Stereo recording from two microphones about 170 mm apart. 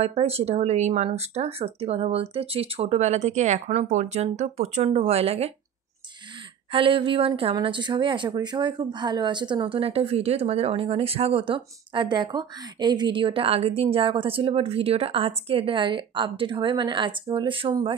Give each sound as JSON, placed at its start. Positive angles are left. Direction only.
{"t": 0.0, "sound": "speech", "side_deg": -35}
{"t": 6.7, "sound": "speech", "side_deg": -30}